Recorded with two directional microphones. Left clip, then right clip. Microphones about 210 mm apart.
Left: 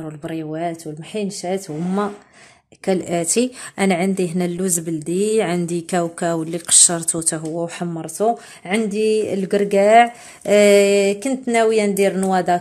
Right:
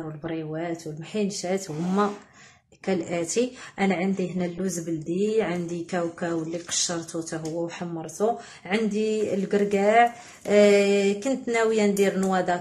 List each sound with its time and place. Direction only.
0.3 s a woman's voice: 45° left (ahead or behind)
1.2 s speech: 30° left (ahead or behind)
2.8 s a woman's voice: 45° left (ahead or behind)